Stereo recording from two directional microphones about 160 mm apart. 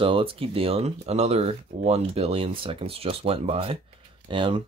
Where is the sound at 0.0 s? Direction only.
35° right (ahead or behind).